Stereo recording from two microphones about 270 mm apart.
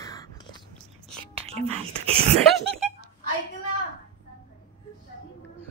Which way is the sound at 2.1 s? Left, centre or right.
Centre.